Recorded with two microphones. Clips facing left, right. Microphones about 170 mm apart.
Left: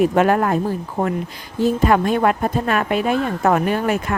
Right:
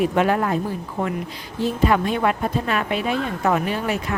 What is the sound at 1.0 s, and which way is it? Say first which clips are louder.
A woman's voice: left 3 dB; 35° left (ahead or behind).